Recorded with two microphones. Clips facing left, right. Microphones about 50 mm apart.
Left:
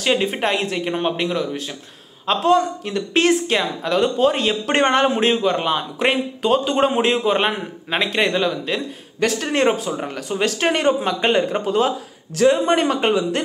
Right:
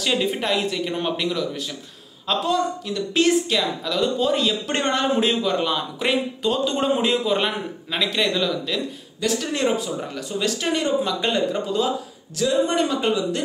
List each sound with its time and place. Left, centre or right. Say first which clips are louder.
0.0 s a man's voice: left 3 dB; left